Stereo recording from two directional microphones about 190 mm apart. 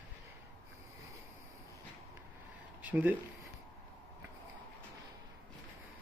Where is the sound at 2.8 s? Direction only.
10° right (ahead or behind).